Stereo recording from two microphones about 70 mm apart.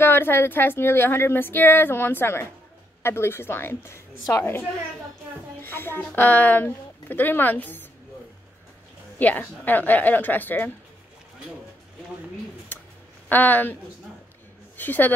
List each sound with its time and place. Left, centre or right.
0.0 s speech: left
9.2 s speech: left
13.3 s speech: left
14.8 s speech: left